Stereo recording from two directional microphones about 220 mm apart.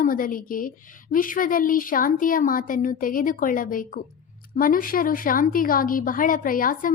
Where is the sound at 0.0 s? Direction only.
40° left (ahead or behind).